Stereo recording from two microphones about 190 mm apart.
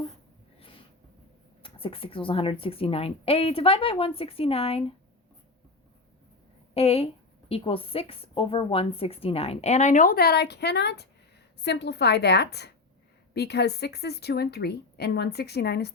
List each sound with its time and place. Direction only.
1.6 s a woman's voice: 30° left (ahead or behind)
6.7 s a woman's voice: 30° left (ahead or behind); by 15.9 s 60° left (ahead or behind)